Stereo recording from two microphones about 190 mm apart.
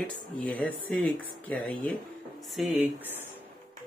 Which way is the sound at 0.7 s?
90° left.